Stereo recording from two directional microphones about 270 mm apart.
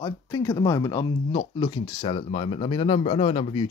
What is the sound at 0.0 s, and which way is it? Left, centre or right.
Speech, centre.